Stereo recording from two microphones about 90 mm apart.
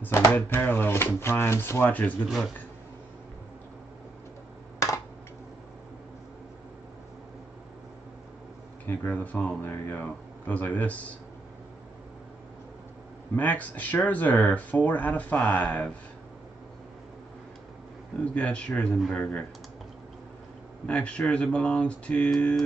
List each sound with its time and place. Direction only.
0.0 s speech: 20° left (ahead or behind)
8.8 s speech: 20° left (ahead or behind)
13.4 s speech: 20° left (ahead or behind)
18.3 s speech: 15° left (ahead or behind)
20.8 s speech: 15° left (ahead or behind)